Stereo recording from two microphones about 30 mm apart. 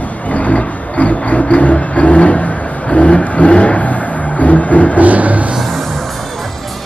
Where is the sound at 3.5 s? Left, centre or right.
Left.